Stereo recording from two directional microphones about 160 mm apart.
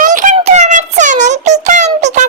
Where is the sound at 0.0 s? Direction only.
55° right (ahead or behind).